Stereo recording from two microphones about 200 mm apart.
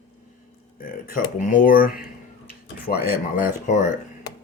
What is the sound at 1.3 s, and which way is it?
Speech, 40° left (ahead or behind).